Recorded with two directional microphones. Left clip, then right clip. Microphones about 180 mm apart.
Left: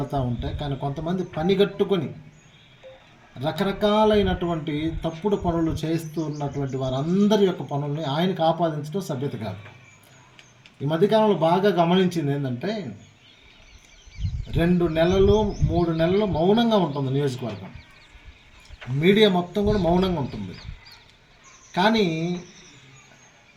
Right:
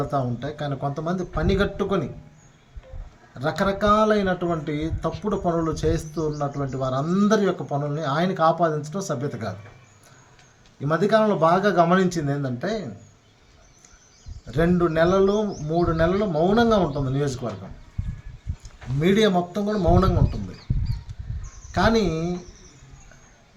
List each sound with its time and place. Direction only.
0.1 s a man's voice: 5° right (ahead or behind)
3.4 s a man's voice: 5° right (ahead or behind)
10.8 s a man's voice: centre (ahead or behind)
14.5 s a man's voice: 5° right (ahead or behind)
19.0 s speech: 10° right (ahead or behind)
21.8 s speech: 10° right (ahead or behind)